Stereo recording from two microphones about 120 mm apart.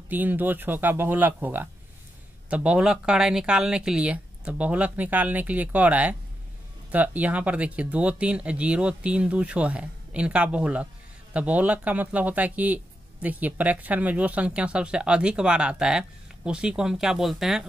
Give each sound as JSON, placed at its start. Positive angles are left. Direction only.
{"t": 0.1, "sound": "speech", "side_deg": -15}